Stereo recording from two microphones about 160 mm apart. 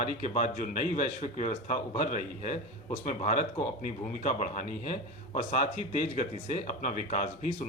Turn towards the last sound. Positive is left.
turn(degrees=55)  # may be behind; listen again after turning